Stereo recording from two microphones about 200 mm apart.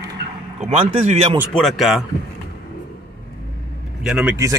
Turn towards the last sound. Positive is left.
turn(degrees=-5)  # may be behind; listen again after turning